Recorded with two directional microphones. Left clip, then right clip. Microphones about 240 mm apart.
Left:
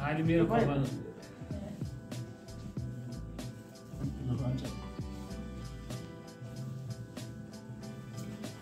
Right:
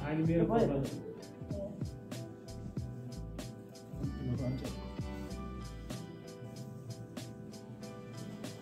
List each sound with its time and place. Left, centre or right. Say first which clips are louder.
0.0 s a man's voice: left 3 dB; centre
4.0 s music: left 1 dB; centre